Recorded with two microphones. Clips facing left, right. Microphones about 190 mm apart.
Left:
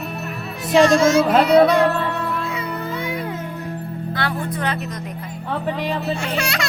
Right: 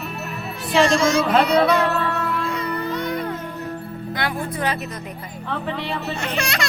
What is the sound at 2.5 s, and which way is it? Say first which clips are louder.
Music: right 1 dB; 10° left (ahead or behind).